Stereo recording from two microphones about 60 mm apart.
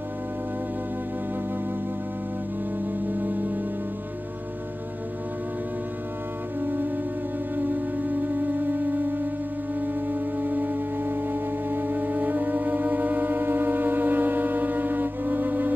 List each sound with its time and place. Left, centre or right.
3.2 s music: right
7.5 s music: right